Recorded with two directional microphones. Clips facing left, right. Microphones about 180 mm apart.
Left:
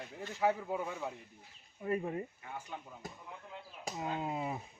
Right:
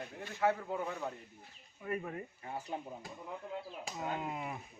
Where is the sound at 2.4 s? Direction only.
35° right (ahead or behind).